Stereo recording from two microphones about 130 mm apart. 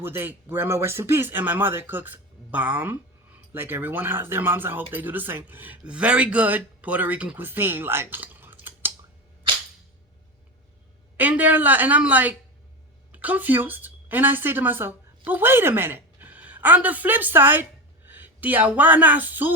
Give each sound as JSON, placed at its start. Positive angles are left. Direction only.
{"t": 0.0, "sound": "speech", "side_deg": -15}
{"t": 11.2, "sound": "a woman's voice", "side_deg": -10}